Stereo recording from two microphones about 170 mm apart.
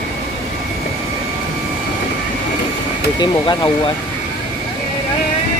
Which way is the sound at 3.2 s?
25° left (ahead or behind).